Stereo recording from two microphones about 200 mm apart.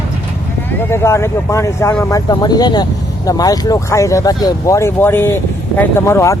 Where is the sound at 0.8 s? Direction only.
10° left (ahead or behind).